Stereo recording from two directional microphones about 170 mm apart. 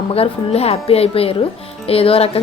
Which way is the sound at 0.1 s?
35° left (ahead or behind).